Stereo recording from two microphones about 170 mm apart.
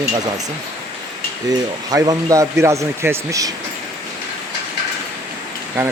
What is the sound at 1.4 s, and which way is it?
A man's voice, 20° right (ahead or behind).